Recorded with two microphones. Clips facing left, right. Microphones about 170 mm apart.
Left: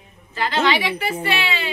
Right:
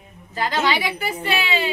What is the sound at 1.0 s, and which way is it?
Speech, 35° right (ahead or behind).